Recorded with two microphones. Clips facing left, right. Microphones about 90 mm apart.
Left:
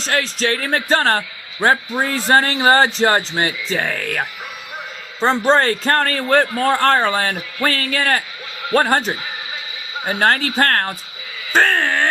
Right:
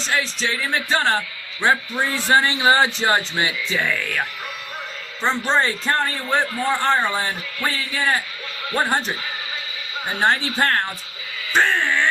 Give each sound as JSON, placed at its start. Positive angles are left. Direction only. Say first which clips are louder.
{"t": 0.1, "sound": "music", "louder": "left 4 dB", "side_deg": 60}
{"t": 1.6, "sound": "a man's voice", "louder": "left 3 dB", "side_deg": 40}
{"t": 5.9, "sound": "speech", "louder": "left 7 dB", "side_deg": 65}
{"t": 6.8, "sound": "speech", "louder": "left 4 dB", "side_deg": 90}
{"t": 10.1, "sound": "music", "louder": "left 3 dB", "side_deg": 60}
{"t": 10.6, "sound": "a man's voice", "louder": "left 3 dB", "side_deg": 50}
{"t": 11.6, "sound": "a sound", "louder": "left 2 dB", "side_deg": 45}